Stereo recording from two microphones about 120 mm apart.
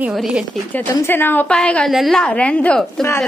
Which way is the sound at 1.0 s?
15° left (ahead or behind).